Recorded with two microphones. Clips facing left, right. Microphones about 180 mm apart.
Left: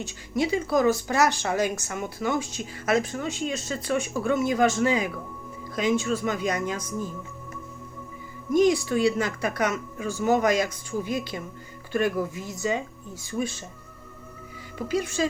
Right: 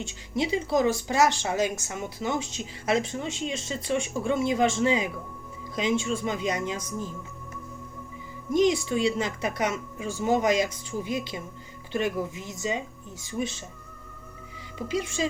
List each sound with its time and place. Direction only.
0.0 s speech: 25° right (ahead or behind)
8.5 s speech: 25° right (ahead or behind)
14.8 s speech: 25° right (ahead or behind)